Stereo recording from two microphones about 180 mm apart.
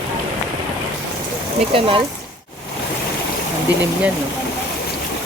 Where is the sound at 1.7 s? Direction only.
30° right (ahead or behind).